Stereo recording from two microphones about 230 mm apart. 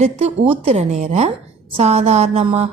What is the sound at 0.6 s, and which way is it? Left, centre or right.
A woman's voice, right.